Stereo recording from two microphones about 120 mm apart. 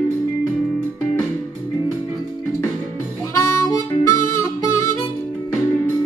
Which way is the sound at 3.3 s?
25° left (ahead or behind).